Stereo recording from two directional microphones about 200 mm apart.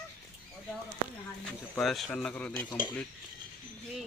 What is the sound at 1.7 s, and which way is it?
Speech, centre (ahead or behind).